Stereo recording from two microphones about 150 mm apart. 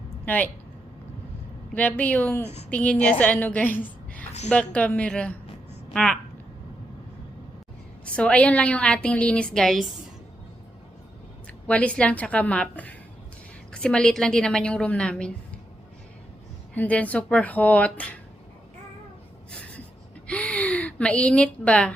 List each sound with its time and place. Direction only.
0.3 s a woman's voice: 10° left (ahead or behind)
1.7 s a woman's voice: 10° left (ahead or behind)
8.0 s a woman's voice: 5° left (ahead or behind)
11.7 s a woman's voice: 10° left (ahead or behind)
16.7 s a woman's voice: 10° left (ahead or behind)
19.5 s a sound: 10° left (ahead or behind)